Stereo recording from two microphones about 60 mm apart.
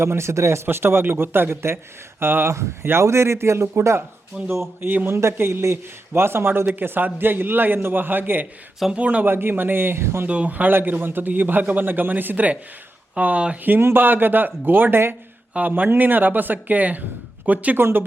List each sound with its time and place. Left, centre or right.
0.0 s a man's voice: right
4.3 s speech: centre
4.8 s a man's voice: right
5.1 s a man's voice: right
8.9 s speech: right
9.2 s a man's voice: right
10.2 s a man's voice: right
13.7 s a man's voice: right
17.7 s a man's voice: right